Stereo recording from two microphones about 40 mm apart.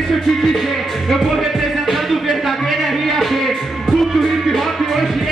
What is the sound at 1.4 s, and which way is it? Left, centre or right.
Music, centre.